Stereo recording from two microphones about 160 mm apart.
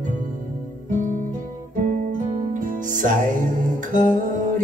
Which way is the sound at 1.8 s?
55° right (ahead or behind).